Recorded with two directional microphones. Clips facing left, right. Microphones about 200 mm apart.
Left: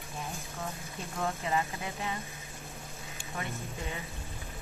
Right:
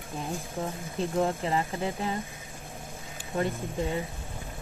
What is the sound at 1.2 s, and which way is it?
Speech, 30° right (ahead or behind).